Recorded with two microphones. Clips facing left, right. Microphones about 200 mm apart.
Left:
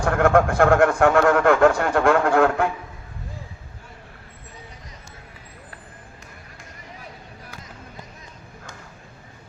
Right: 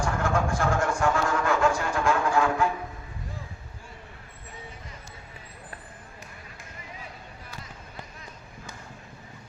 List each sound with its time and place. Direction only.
0.0 s a man's voice: 65° left (ahead or behind)